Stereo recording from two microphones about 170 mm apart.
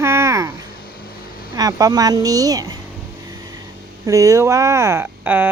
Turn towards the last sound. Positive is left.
turn(degrees=-10)  # may be behind; listen again after turning